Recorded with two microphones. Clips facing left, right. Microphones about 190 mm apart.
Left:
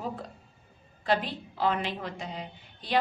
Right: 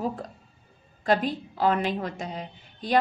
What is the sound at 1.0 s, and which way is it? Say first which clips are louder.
A woman's voice: right 4 dB; 45° right (ahead or behind).